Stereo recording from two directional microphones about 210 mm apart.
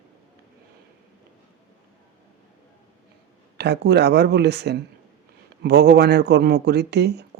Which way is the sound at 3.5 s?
55° right (ahead or behind).